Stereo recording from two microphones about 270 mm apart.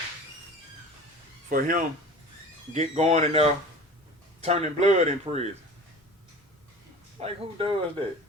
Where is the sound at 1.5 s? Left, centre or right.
Right.